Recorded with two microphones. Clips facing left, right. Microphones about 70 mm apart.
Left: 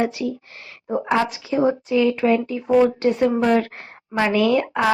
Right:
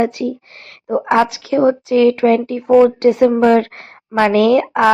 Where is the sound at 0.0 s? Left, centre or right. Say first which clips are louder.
Right 5 dB; right.